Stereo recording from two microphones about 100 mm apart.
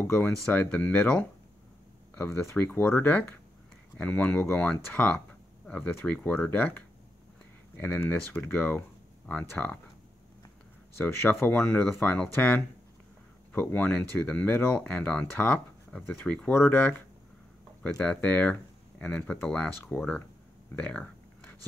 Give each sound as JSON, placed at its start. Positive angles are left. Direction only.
{"t": 0.0, "sound": "speech", "side_deg": 20}
{"t": 2.1, "sound": "speech", "side_deg": 25}
{"t": 7.8, "sound": "speech", "side_deg": 20}
{"t": 11.4, "sound": "speech", "side_deg": 15}
{"t": 20.7, "sound": "a sound", "side_deg": 15}